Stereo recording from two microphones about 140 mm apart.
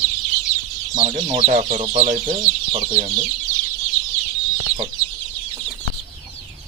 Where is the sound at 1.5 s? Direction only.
55° right (ahead or behind).